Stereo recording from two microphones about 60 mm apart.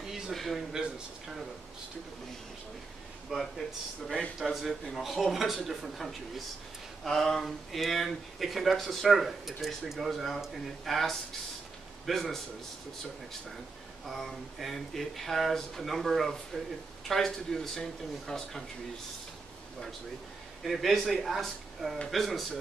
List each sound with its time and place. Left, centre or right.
0.0 s a sound: centre
3.3 s speech: centre
14.0 s speech: centre
20.6 s speech: centre